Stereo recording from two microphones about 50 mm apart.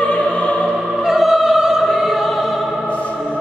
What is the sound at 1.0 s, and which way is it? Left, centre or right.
Opera, centre.